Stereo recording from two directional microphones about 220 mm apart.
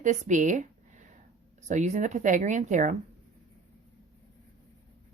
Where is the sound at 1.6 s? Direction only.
35° right (ahead or behind).